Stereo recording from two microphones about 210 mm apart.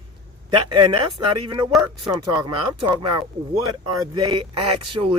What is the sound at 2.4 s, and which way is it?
Speech, 25° right (ahead or behind).